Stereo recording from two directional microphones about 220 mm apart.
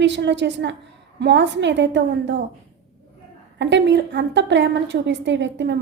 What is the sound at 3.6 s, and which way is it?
A woman's voice, 55° right (ahead or behind).